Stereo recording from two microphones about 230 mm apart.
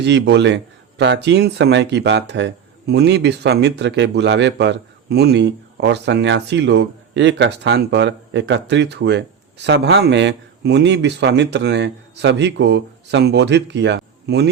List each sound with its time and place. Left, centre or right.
0.0 s speech: right